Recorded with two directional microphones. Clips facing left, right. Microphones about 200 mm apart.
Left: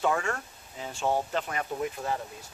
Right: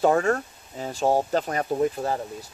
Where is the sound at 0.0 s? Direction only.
40° right (ahead or behind).